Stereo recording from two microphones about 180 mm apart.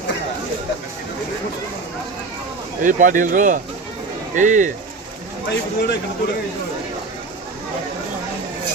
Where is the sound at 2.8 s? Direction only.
45° right (ahead or behind).